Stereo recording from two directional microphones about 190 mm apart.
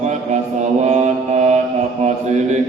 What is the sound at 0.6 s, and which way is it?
Mantra, 35° right (ahead or behind).